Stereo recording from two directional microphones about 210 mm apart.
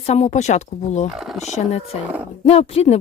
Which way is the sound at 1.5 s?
30° left (ahead or behind).